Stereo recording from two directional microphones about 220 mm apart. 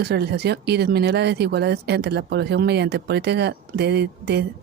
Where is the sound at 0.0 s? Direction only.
50° right (ahead or behind).